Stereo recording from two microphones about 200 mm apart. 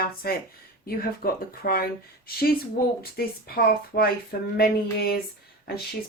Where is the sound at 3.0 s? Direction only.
50° left (ahead or behind).